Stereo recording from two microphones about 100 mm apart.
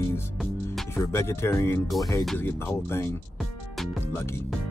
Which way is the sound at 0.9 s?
25° left (ahead or behind).